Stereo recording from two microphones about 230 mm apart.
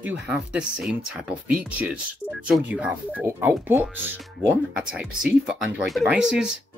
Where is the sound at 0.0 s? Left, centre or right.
Centre.